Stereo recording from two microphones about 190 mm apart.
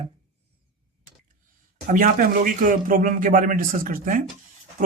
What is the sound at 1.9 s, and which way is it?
Speech, 45° right (ahead or behind).